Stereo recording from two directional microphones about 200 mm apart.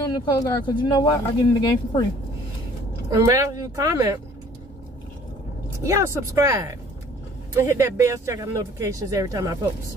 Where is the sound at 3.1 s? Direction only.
15° right (ahead or behind).